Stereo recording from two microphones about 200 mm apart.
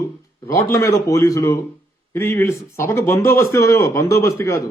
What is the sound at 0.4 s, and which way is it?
A man's voice, 15° left (ahead or behind).